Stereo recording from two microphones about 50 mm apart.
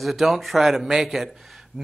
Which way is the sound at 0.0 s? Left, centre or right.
Centre.